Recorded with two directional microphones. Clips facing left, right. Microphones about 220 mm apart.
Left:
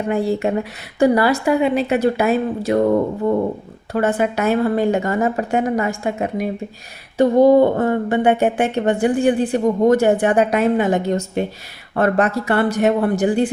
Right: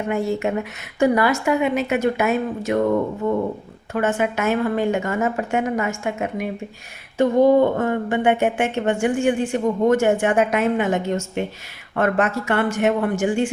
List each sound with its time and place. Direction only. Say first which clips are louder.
0.1 s speech: left 3 dB; 35° left (ahead or behind)